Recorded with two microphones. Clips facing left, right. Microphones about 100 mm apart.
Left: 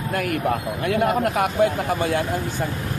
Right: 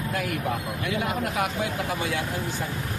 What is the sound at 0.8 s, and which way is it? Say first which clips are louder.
Speech: left 9 dB; 55° left (ahead or behind).